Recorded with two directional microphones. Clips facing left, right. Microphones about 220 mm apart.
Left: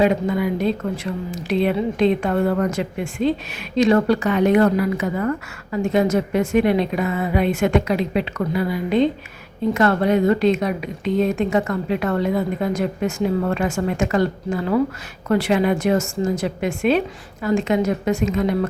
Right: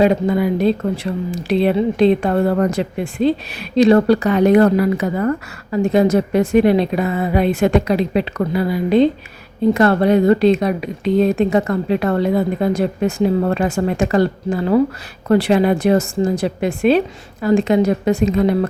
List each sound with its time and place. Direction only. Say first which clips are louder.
0.0 s speech: right 4 dB; 35° right (ahead or behind)